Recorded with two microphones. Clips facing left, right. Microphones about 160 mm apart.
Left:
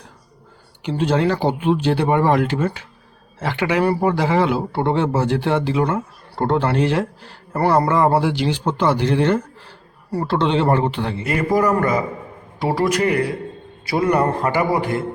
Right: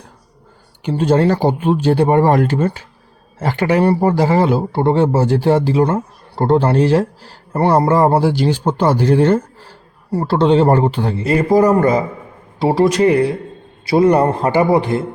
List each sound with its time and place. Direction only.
0.8 s a man's voice: 45° right (ahead or behind); by 15.0 s 25° right (ahead or behind)